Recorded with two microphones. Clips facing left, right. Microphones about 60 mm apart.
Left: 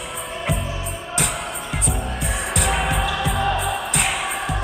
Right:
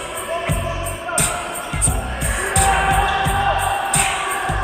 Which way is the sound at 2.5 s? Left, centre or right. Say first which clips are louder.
Right 7 dB; centre.